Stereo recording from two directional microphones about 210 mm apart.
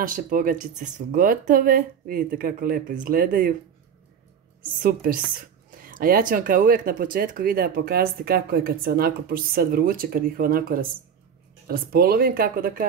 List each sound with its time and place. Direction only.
0.0 s speech: 40° right (ahead or behind)
4.8 s speech: 40° right (ahead or behind)